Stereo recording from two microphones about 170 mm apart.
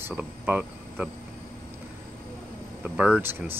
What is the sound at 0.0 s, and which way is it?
Speech, 10° right (ahead or behind).